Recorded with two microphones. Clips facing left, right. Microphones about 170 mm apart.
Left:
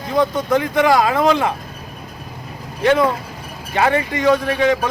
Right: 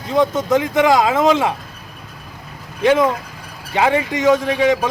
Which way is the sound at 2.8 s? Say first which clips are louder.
Right 1 dB; 15° right (ahead or behind).